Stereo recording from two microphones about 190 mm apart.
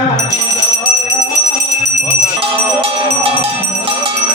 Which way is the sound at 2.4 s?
30° right (ahead or behind).